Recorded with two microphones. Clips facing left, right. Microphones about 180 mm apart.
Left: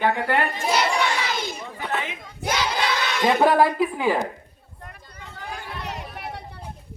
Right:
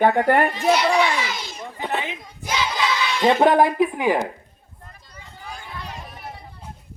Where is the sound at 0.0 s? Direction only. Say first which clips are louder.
Right 5 dB; 50° right (ahead or behind).